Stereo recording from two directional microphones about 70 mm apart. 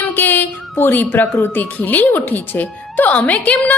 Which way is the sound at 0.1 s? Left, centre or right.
Left.